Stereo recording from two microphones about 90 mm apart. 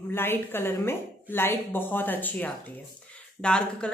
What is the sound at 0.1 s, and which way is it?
A woman's voice, 25° left (ahead or behind).